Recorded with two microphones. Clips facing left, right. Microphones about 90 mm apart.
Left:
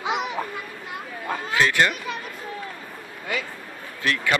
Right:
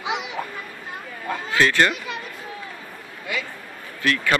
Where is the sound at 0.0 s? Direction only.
45° left (ahead or behind).